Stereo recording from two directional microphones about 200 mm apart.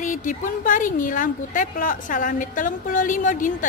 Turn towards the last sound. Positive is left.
turn(degrees=40)  # may be behind; listen again after turning